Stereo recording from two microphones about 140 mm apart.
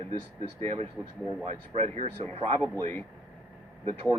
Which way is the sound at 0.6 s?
50° right (ahead or behind).